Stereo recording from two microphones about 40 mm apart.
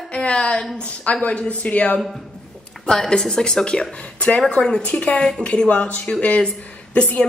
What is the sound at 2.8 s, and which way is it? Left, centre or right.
A woman's voice, centre.